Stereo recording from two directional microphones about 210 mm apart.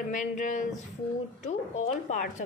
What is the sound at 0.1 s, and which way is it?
Speech, 35° left (ahead or behind).